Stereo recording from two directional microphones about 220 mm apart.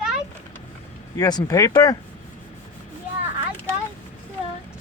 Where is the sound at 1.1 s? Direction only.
15° left (ahead or behind).